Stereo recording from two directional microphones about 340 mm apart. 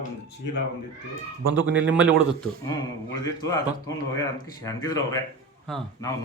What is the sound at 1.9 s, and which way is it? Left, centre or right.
Speech, centre.